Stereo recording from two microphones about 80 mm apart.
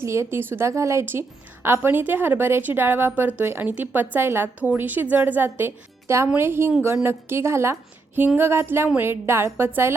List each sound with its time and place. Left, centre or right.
0.0 s a woman's voice: right